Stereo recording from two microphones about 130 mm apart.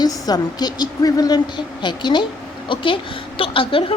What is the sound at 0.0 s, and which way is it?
A woman's voice, 30° left (ahead or behind).